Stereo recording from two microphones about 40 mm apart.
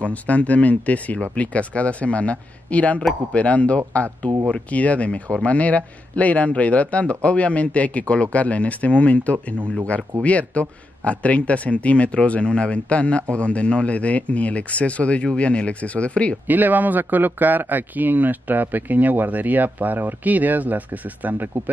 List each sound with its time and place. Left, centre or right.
0.0 s speech: left
16.4 s speech: right